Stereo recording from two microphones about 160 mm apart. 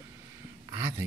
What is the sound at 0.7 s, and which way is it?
Speech, 25° right (ahead or behind).